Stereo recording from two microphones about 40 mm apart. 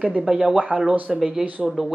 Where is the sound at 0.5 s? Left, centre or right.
Right.